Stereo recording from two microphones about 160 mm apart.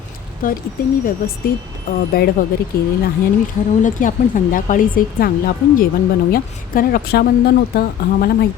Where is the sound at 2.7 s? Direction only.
70° left (ahead or behind).